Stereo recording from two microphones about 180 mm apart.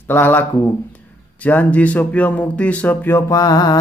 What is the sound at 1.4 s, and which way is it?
Speech, 10° left (ahead or behind).